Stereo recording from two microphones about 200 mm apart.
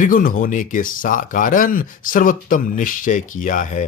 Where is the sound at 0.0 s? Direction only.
45° left (ahead or behind).